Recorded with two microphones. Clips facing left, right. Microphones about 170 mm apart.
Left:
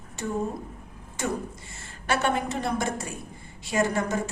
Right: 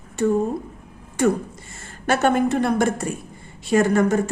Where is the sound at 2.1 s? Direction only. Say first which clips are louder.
Right 7 dB; 50° right (ahead or behind).